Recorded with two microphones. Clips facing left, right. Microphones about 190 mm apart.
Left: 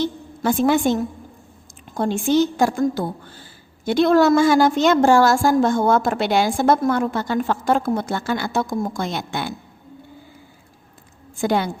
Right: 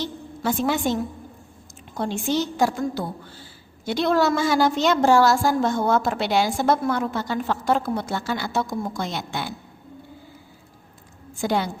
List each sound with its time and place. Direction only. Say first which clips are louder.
0.0 s a woman's voice: left 5 dB; 50° left (ahead or behind)
2.0 s a woman's voice: left 6 dB; 50° left (ahead or behind)
11.3 s a woman's voice: left 3 dB; 55° left (ahead or behind)